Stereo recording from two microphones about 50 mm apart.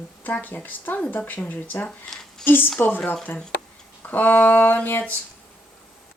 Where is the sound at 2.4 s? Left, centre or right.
Left.